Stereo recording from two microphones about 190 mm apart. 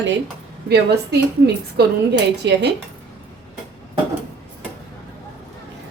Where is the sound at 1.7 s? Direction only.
65° right (ahead or behind).